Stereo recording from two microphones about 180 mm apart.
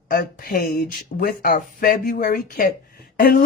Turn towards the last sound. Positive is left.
turn(degrees=55)  # may be behind; listen again after turning